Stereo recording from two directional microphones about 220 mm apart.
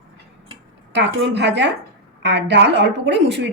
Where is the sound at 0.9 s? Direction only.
50° right (ahead or behind).